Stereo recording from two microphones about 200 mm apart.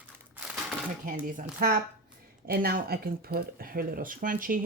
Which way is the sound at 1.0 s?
40° right (ahead or behind).